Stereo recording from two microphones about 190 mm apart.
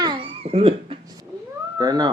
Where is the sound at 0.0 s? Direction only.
25° right (ahead or behind).